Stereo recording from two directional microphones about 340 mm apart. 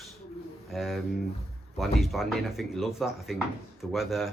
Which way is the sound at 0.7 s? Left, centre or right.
Centre.